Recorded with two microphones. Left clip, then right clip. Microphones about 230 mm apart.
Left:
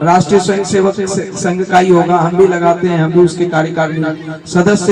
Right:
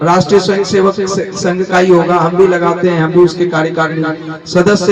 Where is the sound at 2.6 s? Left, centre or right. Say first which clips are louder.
Even; left.